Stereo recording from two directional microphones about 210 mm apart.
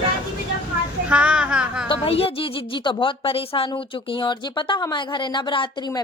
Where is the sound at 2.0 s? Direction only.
30° left (ahead or behind).